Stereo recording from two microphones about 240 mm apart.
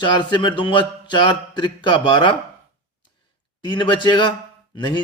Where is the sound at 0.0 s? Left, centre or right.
Centre.